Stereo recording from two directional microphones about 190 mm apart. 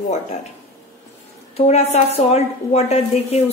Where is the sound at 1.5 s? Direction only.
35° left (ahead or behind).